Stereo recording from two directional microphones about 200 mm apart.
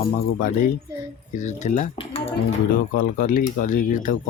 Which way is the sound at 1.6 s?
35° left (ahead or behind).